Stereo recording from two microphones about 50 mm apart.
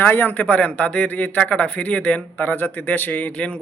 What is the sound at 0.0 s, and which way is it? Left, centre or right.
A man's voice, left.